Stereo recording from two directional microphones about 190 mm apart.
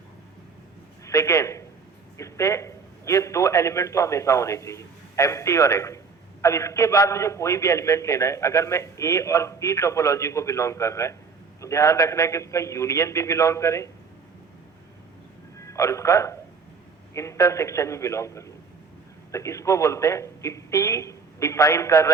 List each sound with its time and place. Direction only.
1.0 s a man's voice: 15° left (ahead or behind)
15.6 s a man's voice: 15° left (ahead or behind)